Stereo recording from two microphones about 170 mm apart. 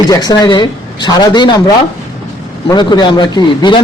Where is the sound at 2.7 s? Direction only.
25° left (ahead or behind).